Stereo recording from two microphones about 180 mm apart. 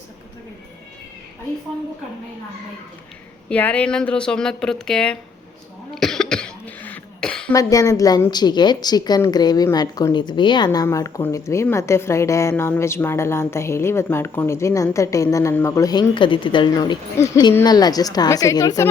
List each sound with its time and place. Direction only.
3.5 s speech: 5° left (ahead or behind)
5.9 s cough: centre (ahead or behind)
7.5 s a woman's voice: 20° left (ahead or behind)